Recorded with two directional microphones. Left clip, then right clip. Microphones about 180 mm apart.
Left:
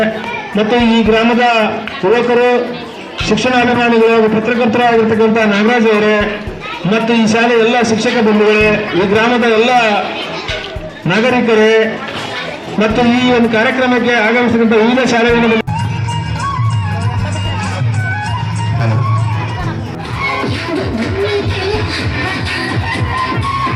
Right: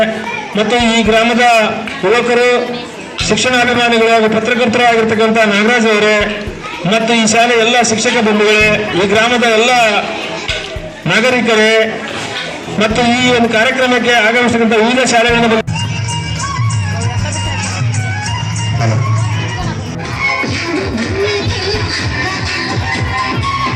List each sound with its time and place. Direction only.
0.5 s a man's voice: 50° left (ahead or behind)
11.0 s a man's voice: 45° left (ahead or behind)